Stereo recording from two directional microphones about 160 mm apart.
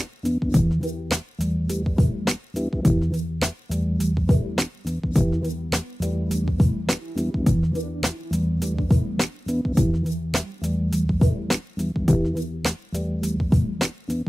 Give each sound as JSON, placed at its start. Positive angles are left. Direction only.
{"t": 0.0, "sound": "music", "side_deg": 0}